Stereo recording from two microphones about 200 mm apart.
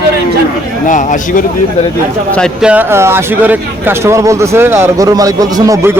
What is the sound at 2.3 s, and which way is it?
Speech, centre (ahead or behind).